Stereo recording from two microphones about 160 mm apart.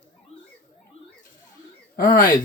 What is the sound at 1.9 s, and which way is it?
Speech, 60° left (ahead or behind).